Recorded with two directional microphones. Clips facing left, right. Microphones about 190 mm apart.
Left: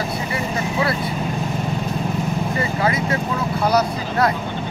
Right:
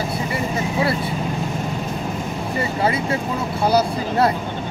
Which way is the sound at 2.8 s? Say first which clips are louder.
Right 1 dB; 30° right (ahead or behind).